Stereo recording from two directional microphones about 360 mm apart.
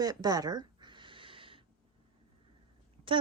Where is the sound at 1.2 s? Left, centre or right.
Centre.